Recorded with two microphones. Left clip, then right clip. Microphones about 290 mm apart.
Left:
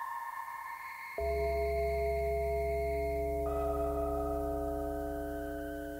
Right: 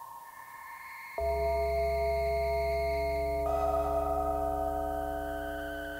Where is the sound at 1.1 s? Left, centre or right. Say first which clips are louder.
Right 3 dB; right.